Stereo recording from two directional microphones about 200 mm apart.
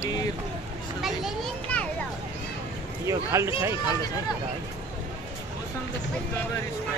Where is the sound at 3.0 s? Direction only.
15° right (ahead or behind).